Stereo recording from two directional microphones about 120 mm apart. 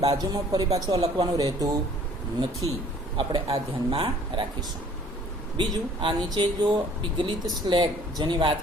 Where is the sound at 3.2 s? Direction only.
40° right (ahead or behind).